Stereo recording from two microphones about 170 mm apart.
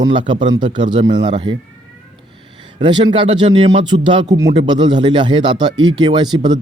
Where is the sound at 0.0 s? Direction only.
30° right (ahead or behind).